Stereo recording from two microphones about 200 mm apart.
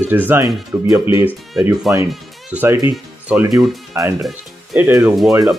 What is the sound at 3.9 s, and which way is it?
Speech, 15° right (ahead or behind).